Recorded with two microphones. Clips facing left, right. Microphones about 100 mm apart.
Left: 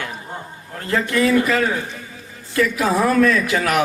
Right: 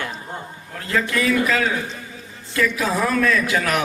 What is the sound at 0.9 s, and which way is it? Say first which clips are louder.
Speech: left 3 dB; 35° left (ahead or behind).